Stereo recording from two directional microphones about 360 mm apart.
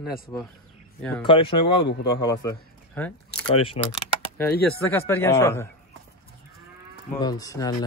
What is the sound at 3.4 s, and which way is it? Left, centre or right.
Speech, centre.